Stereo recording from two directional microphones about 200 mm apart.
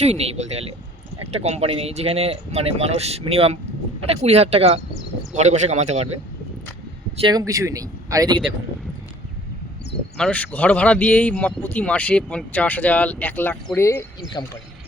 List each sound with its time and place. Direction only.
0.1 s speech: 30° right (ahead or behind)
7.2 s speech: 20° right (ahead or behind)
10.2 s speech: 5° left (ahead or behind)